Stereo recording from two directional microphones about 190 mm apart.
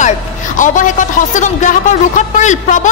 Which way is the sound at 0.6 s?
40° left (ahead or behind).